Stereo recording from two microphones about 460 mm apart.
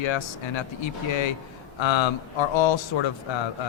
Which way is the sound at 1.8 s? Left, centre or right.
Left.